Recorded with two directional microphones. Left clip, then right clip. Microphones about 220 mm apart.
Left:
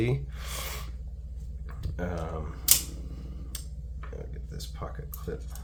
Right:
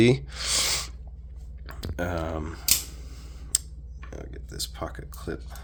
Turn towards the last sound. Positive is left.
turn(degrees=-50)  # may be behind; listen again after turning